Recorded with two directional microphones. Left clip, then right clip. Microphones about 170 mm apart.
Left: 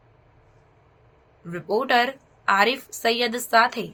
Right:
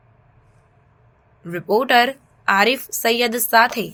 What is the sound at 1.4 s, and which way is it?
A woman's voice, 20° right (ahead or behind).